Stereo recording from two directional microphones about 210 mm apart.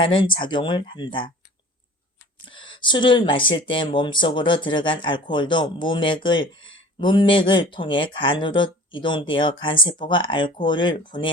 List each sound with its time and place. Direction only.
0.0 s speech: 25° left (ahead or behind)
2.5 s speech: 25° left (ahead or behind)
6.6 s a sound: 70° left (ahead or behind)
7.0 s speech: 20° left (ahead or behind)